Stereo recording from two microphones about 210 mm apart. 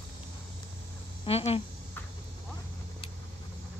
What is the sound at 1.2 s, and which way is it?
Speech, 30° left (ahead or behind).